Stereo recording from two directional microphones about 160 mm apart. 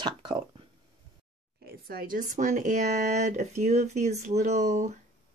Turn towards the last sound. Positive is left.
turn(degrees=-45)  # may be behind; listen again after turning